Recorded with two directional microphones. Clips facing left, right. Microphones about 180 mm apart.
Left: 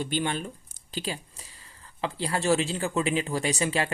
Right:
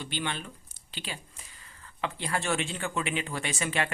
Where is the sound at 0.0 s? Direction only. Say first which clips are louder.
Left 6 dB; 45° left (ahead or behind).